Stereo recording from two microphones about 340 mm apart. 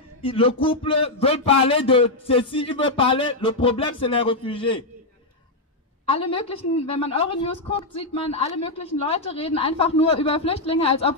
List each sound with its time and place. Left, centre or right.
0.2 s a woman's voice: centre
6.0 s a woman's voice: centre